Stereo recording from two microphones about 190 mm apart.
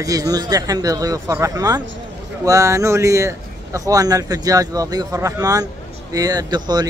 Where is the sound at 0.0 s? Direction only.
20° right (ahead or behind).